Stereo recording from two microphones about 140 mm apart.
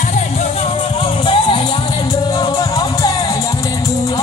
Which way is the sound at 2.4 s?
30° left (ahead or behind).